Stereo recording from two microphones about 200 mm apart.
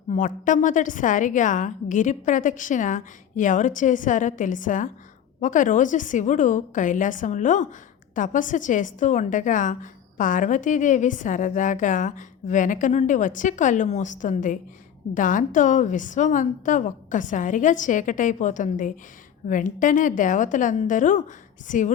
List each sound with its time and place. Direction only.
0.1 s a woman's voice: 40° left (ahead or behind)